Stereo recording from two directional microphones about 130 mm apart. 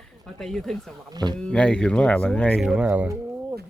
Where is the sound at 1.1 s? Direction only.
35° right (ahead or behind).